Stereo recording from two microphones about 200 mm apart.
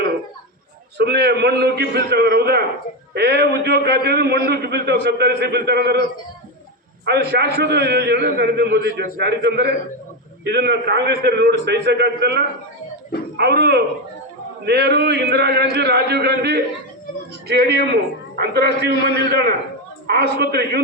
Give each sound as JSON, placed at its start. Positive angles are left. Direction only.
{"t": 0.9, "sound": "a man's voice", "side_deg": -55}